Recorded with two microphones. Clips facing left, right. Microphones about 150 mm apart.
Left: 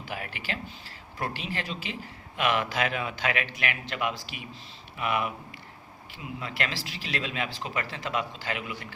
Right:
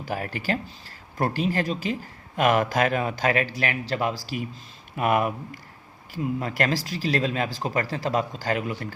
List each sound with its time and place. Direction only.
0.0 s a man's voice: 40° right (ahead or behind)